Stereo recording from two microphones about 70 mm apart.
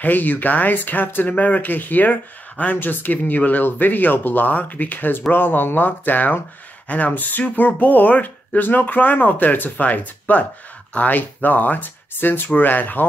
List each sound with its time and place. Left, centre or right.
0.0 s speech: left